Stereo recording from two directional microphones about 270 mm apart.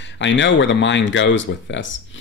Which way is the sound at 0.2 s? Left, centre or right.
Left.